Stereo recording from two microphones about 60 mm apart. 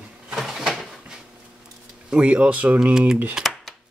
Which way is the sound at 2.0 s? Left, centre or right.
Centre.